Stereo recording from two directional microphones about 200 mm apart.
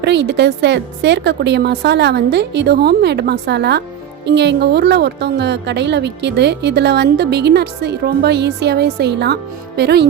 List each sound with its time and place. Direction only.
0.0 s a woman's voice: 60° right (ahead or behind)